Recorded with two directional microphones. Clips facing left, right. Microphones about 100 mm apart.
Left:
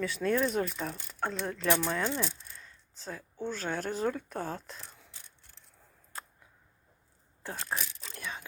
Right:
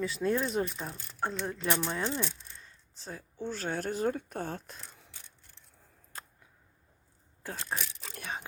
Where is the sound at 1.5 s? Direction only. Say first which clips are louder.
Left 3 dB; 5° right (ahead or behind).